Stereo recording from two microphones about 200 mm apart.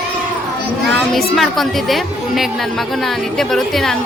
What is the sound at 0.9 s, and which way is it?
A woman's voice, centre (ahead or behind).